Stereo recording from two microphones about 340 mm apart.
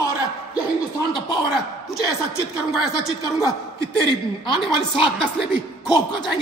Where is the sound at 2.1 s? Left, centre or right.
Centre.